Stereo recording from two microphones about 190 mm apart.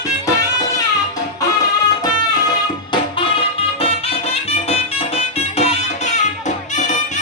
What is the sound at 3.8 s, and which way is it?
Music, 30° left (ahead or behind).